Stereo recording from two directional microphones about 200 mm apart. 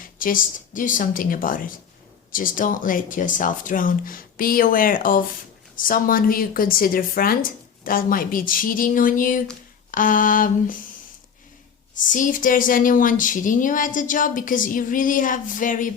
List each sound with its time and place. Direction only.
0.0 s speech: 45° left (ahead or behind)
11.9 s speech: 40° left (ahead or behind)